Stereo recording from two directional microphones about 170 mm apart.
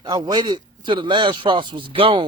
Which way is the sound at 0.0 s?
25° right (ahead or behind).